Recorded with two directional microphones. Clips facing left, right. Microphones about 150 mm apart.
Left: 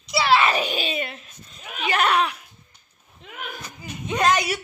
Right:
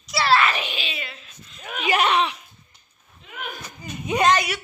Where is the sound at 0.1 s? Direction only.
10° left (ahead or behind).